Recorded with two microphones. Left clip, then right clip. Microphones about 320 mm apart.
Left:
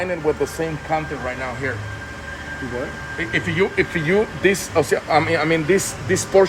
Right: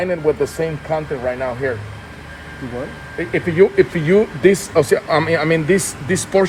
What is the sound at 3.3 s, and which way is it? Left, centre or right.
Speech, centre.